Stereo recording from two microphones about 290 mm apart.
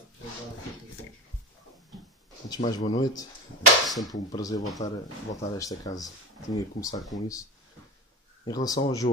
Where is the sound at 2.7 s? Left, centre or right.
Centre.